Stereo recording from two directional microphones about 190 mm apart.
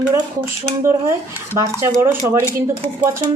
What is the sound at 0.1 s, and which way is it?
Speech, 15° right (ahead or behind).